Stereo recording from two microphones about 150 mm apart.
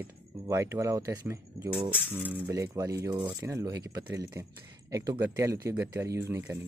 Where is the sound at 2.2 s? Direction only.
15° right (ahead or behind).